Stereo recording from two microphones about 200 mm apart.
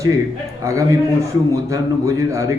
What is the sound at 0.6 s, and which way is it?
A man's voice, 15° right (ahead or behind).